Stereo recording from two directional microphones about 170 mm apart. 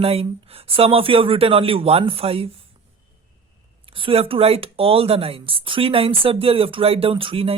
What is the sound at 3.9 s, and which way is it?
Speech, 30° right (ahead or behind).